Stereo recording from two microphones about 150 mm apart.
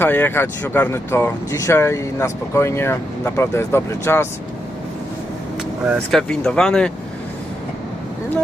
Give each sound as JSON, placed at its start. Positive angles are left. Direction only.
{"t": 0.0, "sound": "speech", "side_deg": 15}
{"t": 6.1, "sound": "speech", "side_deg": 5}